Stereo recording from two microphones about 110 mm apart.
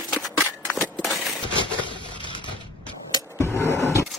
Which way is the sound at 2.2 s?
45° left (ahead or behind).